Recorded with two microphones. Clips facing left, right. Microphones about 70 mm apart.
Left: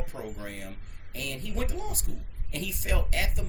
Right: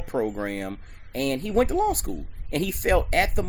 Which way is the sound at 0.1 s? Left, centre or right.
Right.